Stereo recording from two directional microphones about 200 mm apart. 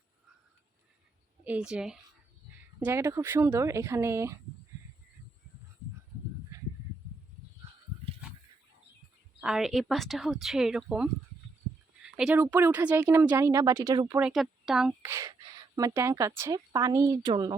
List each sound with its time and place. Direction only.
1.5 s speech: 5° right (ahead or behind)
6.5 s a sound: 15° right (ahead or behind)
9.4 s speech: 5° right (ahead or behind); by 14.2 s 20° right (ahead or behind)
14.2 s speech: 5° right (ahead or behind)
15.7 s speech: 15° right (ahead or behind)